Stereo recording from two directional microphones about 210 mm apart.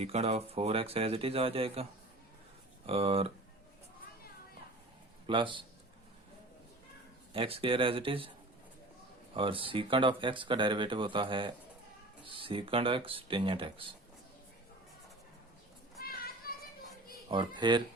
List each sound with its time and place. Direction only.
0.0 s speech: 30° right (ahead or behind)
5.2 s a man's voice: 25° right (ahead or behind)
7.3 s speech: 25° right (ahead or behind)
9.3 s speech: 25° right (ahead or behind)
16.0 s a sound: 45° left (ahead or behind)
17.2 s speech: 20° right (ahead or behind)